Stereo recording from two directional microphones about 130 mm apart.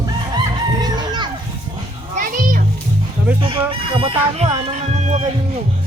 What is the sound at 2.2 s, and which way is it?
Children playing, 90° right.